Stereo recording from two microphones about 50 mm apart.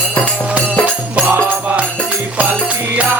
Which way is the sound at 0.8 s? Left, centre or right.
Right.